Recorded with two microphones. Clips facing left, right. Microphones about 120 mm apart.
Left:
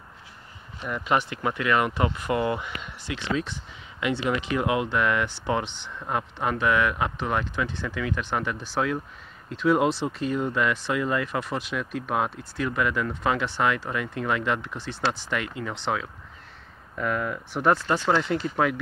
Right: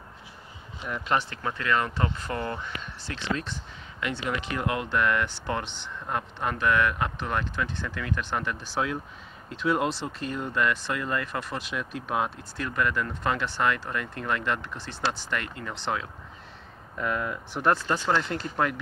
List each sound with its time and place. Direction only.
0.8 s speech: centre (ahead or behind)
1.1 s speech: 15° left (ahead or behind)
16.9 s speech: centre (ahead or behind)